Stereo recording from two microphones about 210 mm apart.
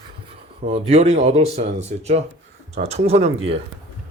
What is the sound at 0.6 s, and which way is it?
Speech, 30° right (ahead or behind).